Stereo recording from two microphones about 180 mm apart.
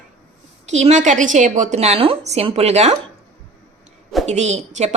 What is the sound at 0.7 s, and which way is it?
A woman's voice, 40° right (ahead or behind).